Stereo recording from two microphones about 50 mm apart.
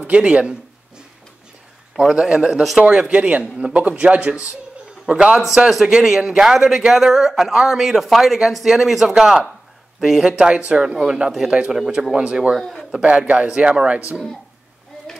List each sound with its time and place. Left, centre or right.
0.0 s a man's voice: right
2.0 s speech: centre
2.4 s speech: centre
2.9 s a man's voice: right
5.7 s speech: centre
10.2 s a man's voice: centre
12.5 s speech: centre
13.6 s a man's voice: right